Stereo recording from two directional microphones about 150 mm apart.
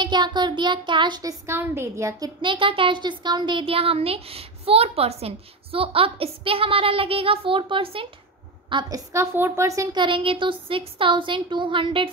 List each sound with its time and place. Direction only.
0.0 s a child's voice: 30° right (ahead or behind)
9.9 s a child's voice: 35° right (ahead or behind)